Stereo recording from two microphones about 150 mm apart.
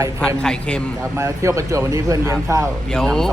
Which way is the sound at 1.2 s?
20° right (ahead or behind).